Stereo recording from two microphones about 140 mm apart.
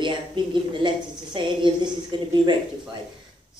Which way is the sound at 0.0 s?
35° right (ahead or behind).